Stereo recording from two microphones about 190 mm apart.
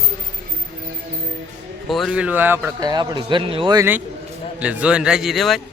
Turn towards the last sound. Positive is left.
turn(degrees=0)  # may be behind; listen again after turning